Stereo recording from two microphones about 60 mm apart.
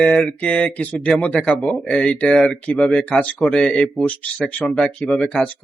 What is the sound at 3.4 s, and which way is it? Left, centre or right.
Speech, centre.